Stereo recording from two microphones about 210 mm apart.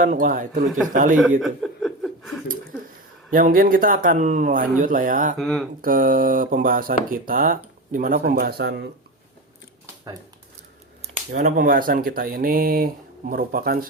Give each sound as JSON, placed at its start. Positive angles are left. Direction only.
{"t": 0.0, "sound": "speech", "side_deg": -40}
{"t": 1.4, "sound": "chuckle", "side_deg": 0}
{"t": 3.3, "sound": "speech", "side_deg": -40}
{"t": 5.4, "sound": "speech", "side_deg": 0}
{"t": 5.8, "sound": "speech", "side_deg": -40}
{"t": 9.8, "sound": "a sound", "side_deg": -20}
{"t": 11.3, "sound": "speech", "side_deg": -40}